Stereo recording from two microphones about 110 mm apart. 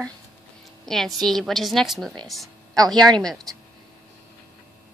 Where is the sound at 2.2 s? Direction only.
Centre (ahead or behind).